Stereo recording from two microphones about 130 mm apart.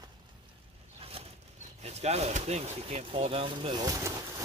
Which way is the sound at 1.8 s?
55° right (ahead or behind).